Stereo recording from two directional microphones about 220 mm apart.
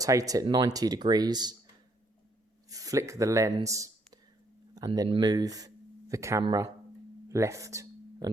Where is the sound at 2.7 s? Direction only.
15° right (ahead or behind).